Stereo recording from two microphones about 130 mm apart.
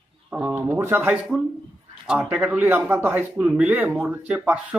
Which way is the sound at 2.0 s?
5° right (ahead or behind).